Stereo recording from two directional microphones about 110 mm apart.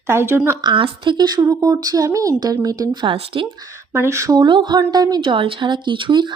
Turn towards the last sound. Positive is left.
turn(degrees=-45)  # may be behind; listen again after turning